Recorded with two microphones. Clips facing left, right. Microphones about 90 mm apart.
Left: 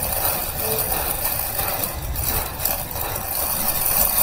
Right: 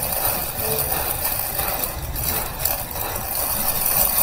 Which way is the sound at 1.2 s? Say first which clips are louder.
Even; 65° right (ahead or behind).